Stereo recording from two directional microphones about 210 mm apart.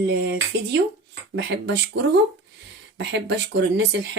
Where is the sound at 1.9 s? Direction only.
55° right (ahead or behind).